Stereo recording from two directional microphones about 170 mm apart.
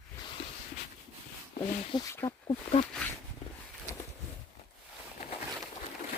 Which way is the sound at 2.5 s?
35° left (ahead or behind).